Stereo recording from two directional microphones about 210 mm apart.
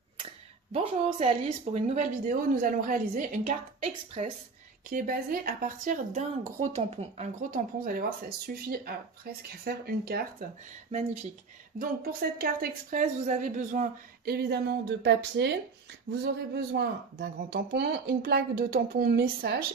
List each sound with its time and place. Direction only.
0.2 s a sound: 25° right (ahead or behind)
1.6 s a woman's voice: 35° right (ahead or behind)
4.8 s speech: 40° right (ahead or behind)